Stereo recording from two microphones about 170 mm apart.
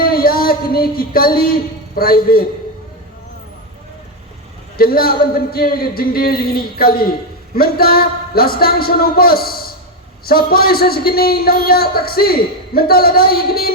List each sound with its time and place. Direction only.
0.0 s a man's voice: 60° left (ahead or behind)
4.8 s a man's voice: 60° left (ahead or behind)